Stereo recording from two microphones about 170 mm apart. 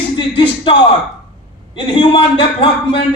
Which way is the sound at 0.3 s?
30° left (ahead or behind).